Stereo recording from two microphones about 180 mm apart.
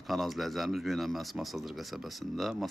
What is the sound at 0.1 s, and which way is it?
Speech, centre (ahead or behind).